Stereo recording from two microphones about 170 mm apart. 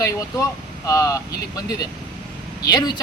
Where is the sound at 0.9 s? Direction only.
20° left (ahead or behind).